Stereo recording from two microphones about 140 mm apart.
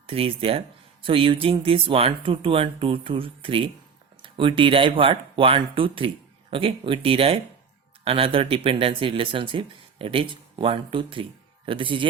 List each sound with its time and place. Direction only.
0.1 s speech: 40° right (ahead or behind)